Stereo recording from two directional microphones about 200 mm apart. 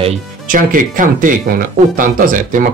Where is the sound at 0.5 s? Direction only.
40° right (ahead or behind).